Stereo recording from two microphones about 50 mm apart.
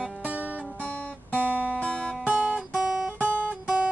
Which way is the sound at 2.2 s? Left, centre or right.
Right.